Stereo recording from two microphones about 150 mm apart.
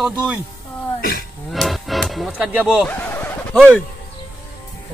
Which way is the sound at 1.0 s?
80° left.